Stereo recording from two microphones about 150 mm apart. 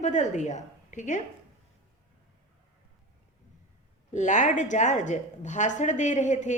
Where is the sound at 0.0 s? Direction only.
50° left (ahead or behind).